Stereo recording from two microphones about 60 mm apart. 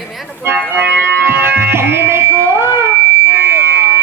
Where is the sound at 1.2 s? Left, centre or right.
Right.